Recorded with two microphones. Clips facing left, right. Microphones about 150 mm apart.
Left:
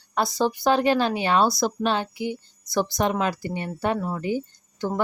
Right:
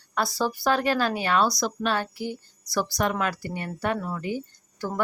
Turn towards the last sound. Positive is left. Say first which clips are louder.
# left 3 dB
turn(degrees=25)  # may be behind; listen again after turning